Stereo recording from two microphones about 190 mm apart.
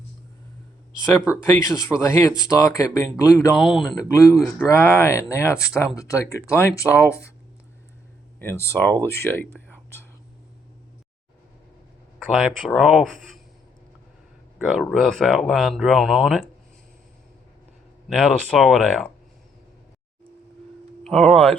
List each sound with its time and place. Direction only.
1.6 s speech: 15° left (ahead or behind)
3.5 s speech: centre (ahead or behind)
4.1 s speech: 15° left (ahead or behind)
8.4 s speech: 10° left (ahead or behind)
12.3 s speech: centre (ahead or behind)
14.7 s speech: centre (ahead or behind)
18.1 s speech: centre (ahead or behind)
21.0 s speech: 5° left (ahead or behind)